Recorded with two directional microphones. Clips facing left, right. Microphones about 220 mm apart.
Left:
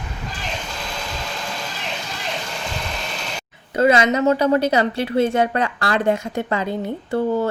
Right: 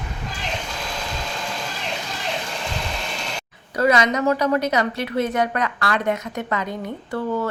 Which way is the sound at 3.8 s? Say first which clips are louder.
Left 3 dB; 25° left (ahead or behind).